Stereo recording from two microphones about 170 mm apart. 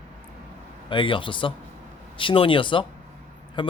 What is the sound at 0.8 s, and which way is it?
Speech, 30° left (ahead or behind).